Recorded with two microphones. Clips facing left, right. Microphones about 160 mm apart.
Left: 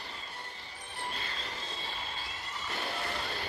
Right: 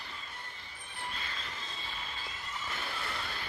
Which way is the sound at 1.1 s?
35° left (ahead or behind).